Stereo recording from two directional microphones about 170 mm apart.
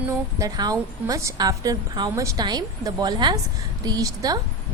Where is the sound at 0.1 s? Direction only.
20° right (ahead or behind).